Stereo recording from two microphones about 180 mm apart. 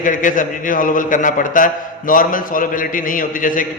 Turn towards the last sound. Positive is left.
turn(degrees=50)  # may be behind; listen again after turning